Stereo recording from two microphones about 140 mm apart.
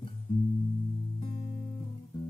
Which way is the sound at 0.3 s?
35° left (ahead or behind).